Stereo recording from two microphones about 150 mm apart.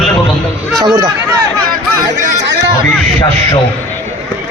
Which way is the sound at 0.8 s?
25° right (ahead or behind).